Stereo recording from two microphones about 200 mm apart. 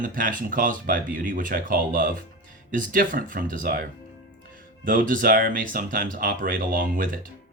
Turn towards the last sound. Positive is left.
turn(degrees=-45)  # may be behind; listen again after turning